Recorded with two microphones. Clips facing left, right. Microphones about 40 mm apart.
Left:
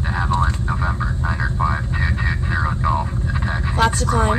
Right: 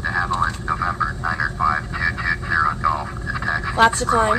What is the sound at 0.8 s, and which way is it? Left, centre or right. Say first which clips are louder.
Vehicle: right 4 dB; left.